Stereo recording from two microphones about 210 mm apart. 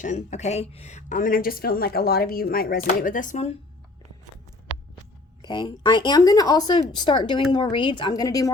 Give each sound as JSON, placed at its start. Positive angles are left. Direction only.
{"t": 0.0, "sound": "a woman's voice", "side_deg": 35}
{"t": 5.4, "sound": "a woman's voice", "side_deg": 20}